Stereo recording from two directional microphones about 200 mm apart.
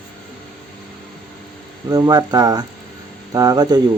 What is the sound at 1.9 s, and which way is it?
Speech, 20° right (ahead or behind).